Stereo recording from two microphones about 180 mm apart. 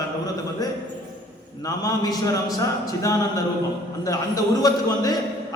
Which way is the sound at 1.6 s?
20° left (ahead or behind).